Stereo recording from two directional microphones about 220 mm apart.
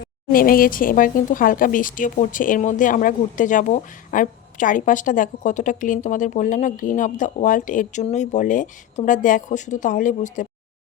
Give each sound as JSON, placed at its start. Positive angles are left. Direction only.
{"t": 0.3, "sound": "speech", "side_deg": 40}